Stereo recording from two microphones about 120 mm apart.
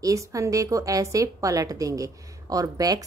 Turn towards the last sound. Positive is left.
turn(degrees=-30)  # may be behind; listen again after turning